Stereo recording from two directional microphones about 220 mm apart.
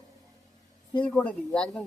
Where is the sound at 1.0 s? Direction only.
5° left (ahead or behind).